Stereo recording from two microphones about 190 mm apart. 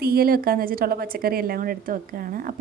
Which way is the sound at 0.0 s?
55° right (ahead or behind).